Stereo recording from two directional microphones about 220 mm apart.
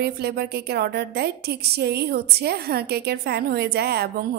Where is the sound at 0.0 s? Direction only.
45° right (ahead or behind).